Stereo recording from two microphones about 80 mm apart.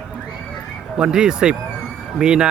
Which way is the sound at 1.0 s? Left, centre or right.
Centre.